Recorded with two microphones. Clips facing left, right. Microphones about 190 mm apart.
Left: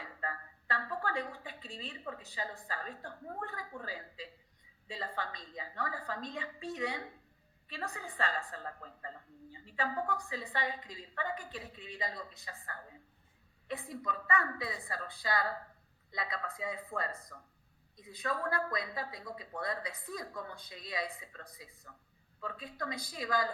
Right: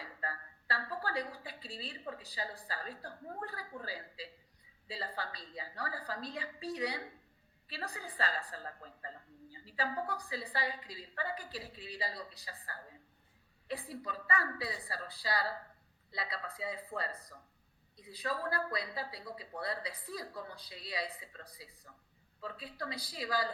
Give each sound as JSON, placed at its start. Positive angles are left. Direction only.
{"t": 0.0, "sound": "a woman's voice", "side_deg": -35}